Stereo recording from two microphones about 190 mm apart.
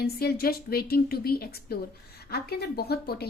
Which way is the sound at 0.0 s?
55° left (ahead or behind).